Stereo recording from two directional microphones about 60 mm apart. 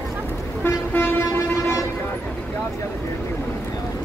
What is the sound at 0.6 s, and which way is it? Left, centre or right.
Toot, left.